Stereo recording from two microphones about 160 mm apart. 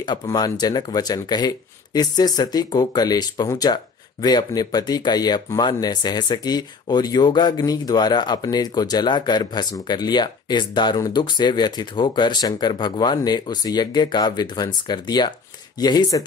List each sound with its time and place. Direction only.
0.0 s speech: 25° left (ahead or behind)